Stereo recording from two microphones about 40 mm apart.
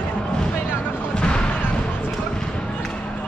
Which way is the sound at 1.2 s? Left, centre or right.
Left.